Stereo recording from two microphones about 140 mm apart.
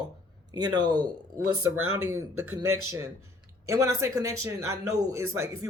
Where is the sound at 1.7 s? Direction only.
15° right (ahead or behind).